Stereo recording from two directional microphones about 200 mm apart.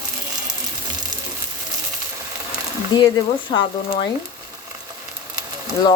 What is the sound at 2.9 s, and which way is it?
Speech, 20° left (ahead or behind).